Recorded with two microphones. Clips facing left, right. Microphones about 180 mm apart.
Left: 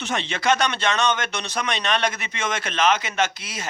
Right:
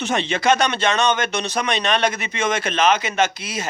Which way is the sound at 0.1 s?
10° right (ahead or behind).